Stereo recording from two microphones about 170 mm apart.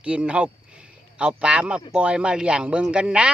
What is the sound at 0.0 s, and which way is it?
Speech, 5° right (ahead or behind).